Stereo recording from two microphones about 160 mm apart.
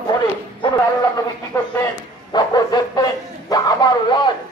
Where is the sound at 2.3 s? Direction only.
25° left (ahead or behind).